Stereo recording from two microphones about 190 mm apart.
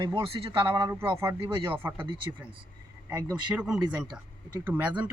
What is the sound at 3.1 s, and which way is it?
Speech, 20° right (ahead or behind).